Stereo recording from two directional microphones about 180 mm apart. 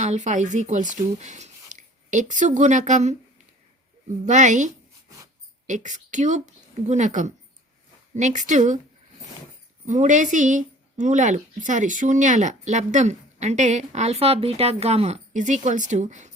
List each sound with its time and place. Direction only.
0.0 s speech: 40° right (ahead or behind)
4.3 s speech: 45° right (ahead or behind)
9.8 s speech: 40° right (ahead or behind)